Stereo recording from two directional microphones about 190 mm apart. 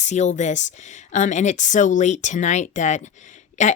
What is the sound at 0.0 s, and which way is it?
Speech, 40° left (ahead or behind).